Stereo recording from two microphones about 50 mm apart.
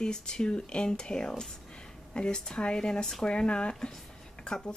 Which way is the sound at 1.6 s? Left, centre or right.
Centre.